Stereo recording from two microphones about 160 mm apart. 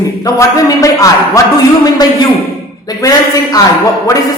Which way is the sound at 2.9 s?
20° left (ahead or behind).